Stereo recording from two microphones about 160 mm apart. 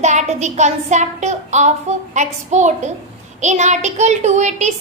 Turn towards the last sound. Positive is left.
turn(degrees=-45)  # may be behind; listen again after turning